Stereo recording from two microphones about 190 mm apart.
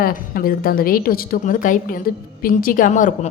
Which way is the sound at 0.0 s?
50° left (ahead or behind).